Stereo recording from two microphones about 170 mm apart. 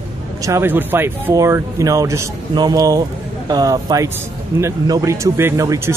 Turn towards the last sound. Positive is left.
turn(degrees=-15)  # may be behind; listen again after turning